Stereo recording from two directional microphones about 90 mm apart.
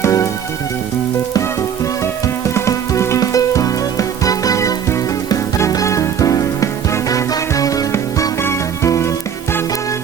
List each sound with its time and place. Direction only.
0.0 s music: 35° left (ahead or behind)
1.3 s music: 35° left (ahead or behind)